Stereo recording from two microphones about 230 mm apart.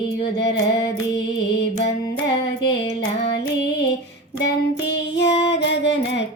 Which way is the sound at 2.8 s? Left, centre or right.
Left.